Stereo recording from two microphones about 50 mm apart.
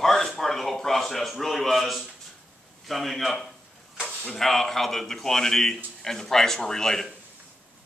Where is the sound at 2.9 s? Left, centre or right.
Centre.